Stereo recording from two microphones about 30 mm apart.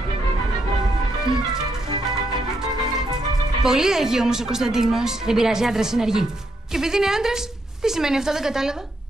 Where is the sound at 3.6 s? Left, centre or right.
Centre.